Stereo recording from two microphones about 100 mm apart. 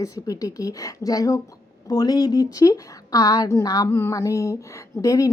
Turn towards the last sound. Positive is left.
turn(degrees=35)  # may be behind; listen again after turning